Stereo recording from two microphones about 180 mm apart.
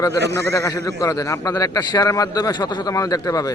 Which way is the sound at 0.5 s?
15° left (ahead or behind).